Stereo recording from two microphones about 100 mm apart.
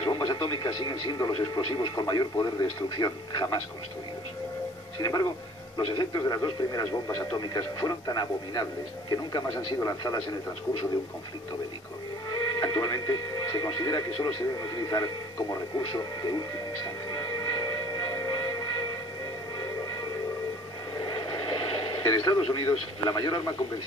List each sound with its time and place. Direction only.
0.0 s speech: 50° left (ahead or behind)
5.0 s speech: 45° left (ahead or behind)
12.3 s speech: 45° left (ahead or behind)
16.8 s music: 45° left (ahead or behind)
21.0 s radio: 50° left (ahead or behind)
22.5 s speech: 50° left (ahead or behind)